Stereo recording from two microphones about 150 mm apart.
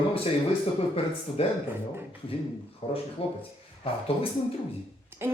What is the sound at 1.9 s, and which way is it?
Speech, 15° right (ahead or behind).